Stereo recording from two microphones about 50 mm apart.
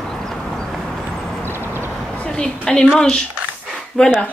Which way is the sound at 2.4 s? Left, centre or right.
Centre.